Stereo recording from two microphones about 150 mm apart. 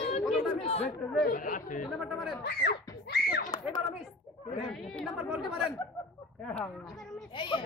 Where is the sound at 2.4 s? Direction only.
90° left.